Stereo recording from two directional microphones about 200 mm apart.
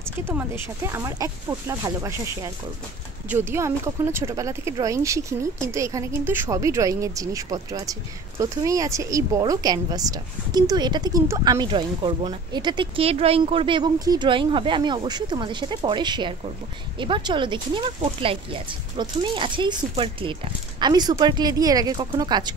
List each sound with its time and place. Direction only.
0.2 s speech: 10° right (ahead or behind)